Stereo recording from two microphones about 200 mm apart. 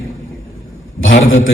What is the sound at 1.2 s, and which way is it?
Speech, 75° left (ahead or behind).